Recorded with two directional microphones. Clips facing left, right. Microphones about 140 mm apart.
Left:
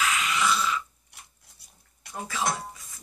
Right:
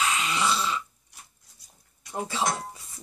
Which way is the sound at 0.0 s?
30° right (ahead or behind).